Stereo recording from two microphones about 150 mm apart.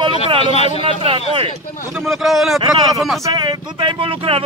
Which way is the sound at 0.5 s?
45° left (ahead or behind).